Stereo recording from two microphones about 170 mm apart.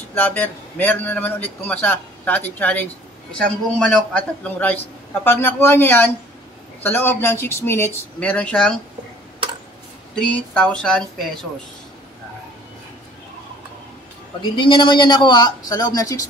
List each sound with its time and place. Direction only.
0.1 s a man's voice: 10° left (ahead or behind)
10.1 s speech: 10° left (ahead or behind)
14.4 s a man's voice: 30° left (ahead or behind)